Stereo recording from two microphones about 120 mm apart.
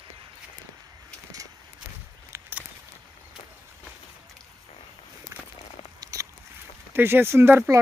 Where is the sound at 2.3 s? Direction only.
15° right (ahead or behind).